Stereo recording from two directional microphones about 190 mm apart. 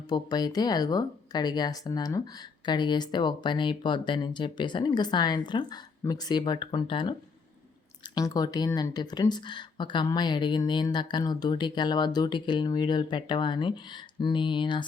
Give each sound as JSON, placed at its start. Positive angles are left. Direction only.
{"t": 0.1, "sound": "speech", "side_deg": 20}